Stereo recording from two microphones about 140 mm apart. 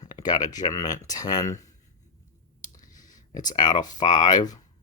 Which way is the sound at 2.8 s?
70° left (ahead or behind).